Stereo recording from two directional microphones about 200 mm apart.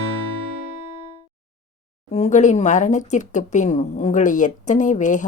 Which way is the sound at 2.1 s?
35° left (ahead or behind).